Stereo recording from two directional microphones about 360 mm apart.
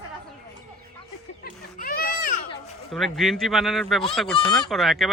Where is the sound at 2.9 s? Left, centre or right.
Centre.